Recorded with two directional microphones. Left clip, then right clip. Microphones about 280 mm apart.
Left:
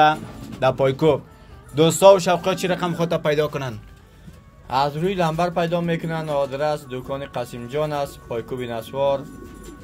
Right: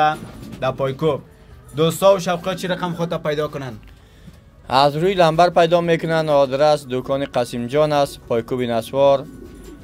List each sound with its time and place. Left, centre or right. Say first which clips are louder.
0.0 s a man's voice: left 1 dB; centre
4.6 s a man's voice: right 6 dB; right